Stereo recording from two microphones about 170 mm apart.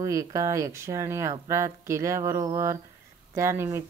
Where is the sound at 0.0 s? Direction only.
20° right (ahead or behind).